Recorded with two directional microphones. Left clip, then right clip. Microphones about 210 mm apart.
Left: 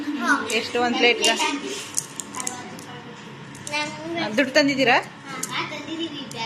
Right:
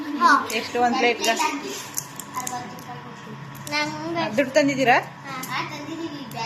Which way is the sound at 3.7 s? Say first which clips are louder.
Right 2 dB; 55° right (ahead or behind).